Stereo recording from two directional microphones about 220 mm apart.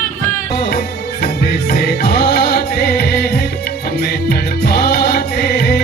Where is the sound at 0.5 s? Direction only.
45° left (ahead or behind).